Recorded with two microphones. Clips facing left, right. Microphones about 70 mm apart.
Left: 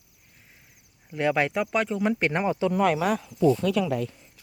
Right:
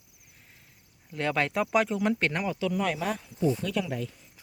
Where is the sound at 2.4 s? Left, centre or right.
Left.